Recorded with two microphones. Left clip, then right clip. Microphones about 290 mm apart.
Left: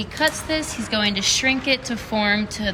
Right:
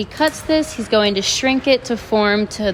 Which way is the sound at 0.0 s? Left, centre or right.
Centre.